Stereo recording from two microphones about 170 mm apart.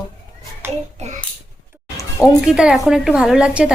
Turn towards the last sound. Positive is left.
turn(degrees=-5)  # may be behind; listen again after turning